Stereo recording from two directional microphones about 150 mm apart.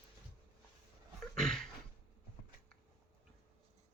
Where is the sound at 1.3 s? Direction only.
5° left (ahead or behind).